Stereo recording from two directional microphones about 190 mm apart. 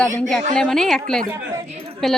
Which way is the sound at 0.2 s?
Centre (ahead or behind).